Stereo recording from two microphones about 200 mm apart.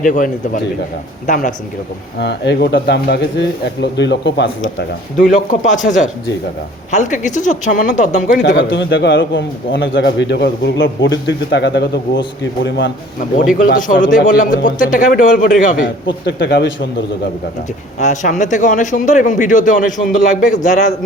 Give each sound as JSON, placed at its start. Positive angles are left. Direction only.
{"t": 0.0, "sound": "speech", "side_deg": 40}
{"t": 2.1, "sound": "a man's voice", "side_deg": 55}
{"t": 5.3, "sound": "speech", "side_deg": 40}
{"t": 8.8, "sound": "a man's voice", "side_deg": 60}
{"t": 13.7, "sound": "speech", "side_deg": 40}
{"t": 16.2, "sound": "a man's voice", "side_deg": 60}
{"t": 18.0, "sound": "speech", "side_deg": 35}